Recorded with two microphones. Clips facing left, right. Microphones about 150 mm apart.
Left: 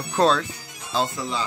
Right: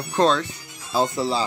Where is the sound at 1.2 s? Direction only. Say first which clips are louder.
Right 5 dB; 35° right (ahead or behind).